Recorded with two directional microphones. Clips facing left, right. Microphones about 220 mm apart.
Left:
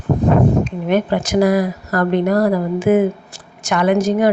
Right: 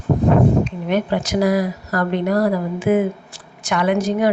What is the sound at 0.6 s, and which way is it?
Speech, 50° left (ahead or behind).